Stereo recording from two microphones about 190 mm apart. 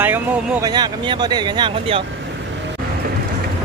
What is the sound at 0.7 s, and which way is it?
Speech, 20° right (ahead or behind).